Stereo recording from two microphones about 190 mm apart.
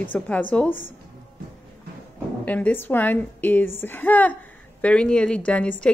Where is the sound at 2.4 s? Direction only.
10° left (ahead or behind).